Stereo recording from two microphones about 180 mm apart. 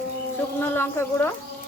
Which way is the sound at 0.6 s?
10° left (ahead or behind).